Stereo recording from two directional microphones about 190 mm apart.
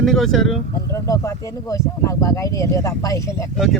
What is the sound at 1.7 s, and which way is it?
Speech, 15° left (ahead or behind).